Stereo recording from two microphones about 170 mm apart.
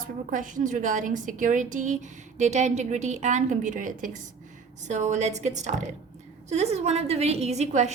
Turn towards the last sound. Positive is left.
turn(degrees=-45)  # may be behind; listen again after turning